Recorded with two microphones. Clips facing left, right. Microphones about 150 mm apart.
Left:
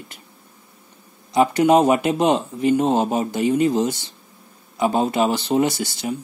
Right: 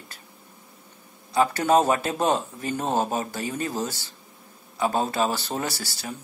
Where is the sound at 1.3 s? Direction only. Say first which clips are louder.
Left 5 dB; 15° left (ahead or behind).